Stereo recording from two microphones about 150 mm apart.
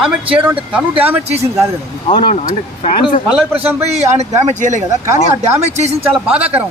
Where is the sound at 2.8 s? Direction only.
45° left (ahead or behind).